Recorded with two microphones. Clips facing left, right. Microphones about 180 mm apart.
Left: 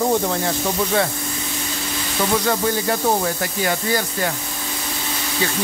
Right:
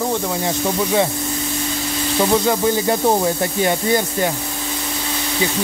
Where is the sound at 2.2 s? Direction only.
20° right (ahead or behind).